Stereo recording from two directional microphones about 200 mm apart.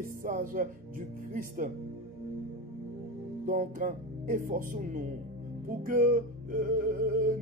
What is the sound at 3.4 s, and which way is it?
Speech, 40° right (ahead or behind).